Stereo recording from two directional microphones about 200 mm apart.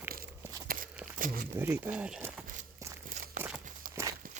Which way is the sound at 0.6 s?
45° right (ahead or behind).